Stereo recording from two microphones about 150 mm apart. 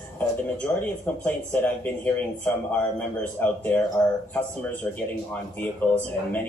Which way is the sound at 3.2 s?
10° left (ahead or behind).